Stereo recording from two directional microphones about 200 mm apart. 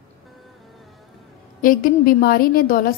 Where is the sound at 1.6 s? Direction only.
45° left (ahead or behind).